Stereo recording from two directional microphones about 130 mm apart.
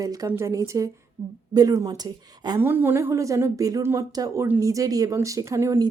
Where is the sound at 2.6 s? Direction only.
15° right (ahead or behind).